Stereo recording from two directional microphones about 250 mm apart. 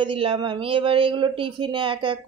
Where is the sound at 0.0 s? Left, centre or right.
Right.